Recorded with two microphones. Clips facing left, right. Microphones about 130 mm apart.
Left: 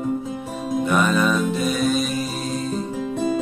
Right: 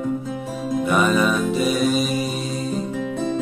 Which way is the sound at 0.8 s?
Centre (ahead or behind).